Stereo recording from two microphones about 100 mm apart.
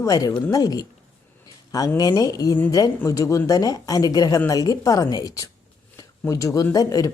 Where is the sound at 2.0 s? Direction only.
40° left (ahead or behind).